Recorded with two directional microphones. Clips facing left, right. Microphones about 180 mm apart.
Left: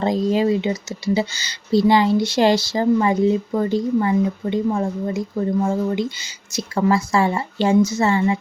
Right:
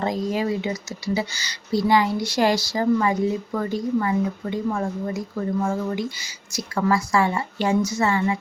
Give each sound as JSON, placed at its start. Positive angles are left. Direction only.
{"t": 0.0, "sound": "speech", "side_deg": 25}